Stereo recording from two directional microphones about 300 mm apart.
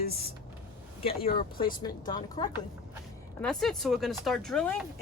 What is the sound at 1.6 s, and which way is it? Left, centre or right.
Speech, centre.